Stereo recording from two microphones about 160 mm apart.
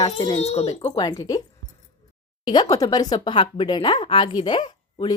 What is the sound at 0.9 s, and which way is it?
Speech, 25° left (ahead or behind).